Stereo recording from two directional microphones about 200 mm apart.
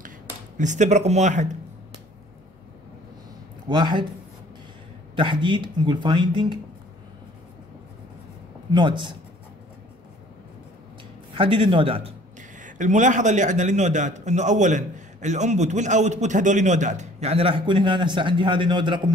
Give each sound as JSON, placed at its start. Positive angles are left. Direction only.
{"t": 0.6, "sound": "a man's voice", "side_deg": -35}
{"t": 3.6, "sound": "speech", "side_deg": -25}
{"t": 5.1, "sound": "speech", "side_deg": -25}
{"t": 8.7, "sound": "speech", "side_deg": -25}
{"t": 11.3, "sound": "a man's voice", "side_deg": -25}